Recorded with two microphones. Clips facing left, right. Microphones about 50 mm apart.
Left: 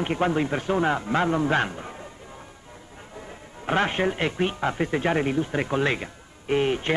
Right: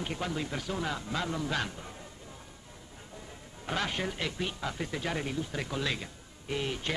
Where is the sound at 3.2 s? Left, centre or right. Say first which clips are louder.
Left 7 dB; left.